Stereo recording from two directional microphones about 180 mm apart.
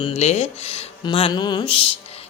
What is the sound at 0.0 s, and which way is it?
A man's voice, 35° left (ahead or behind).